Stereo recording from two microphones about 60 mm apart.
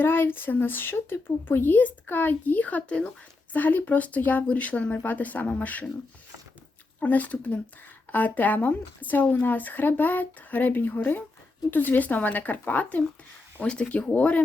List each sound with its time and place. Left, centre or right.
0.0 s speech: left
7.0 s speech: left